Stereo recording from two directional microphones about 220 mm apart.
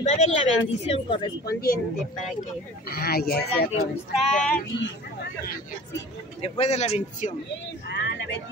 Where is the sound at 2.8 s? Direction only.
45° left (ahead or behind).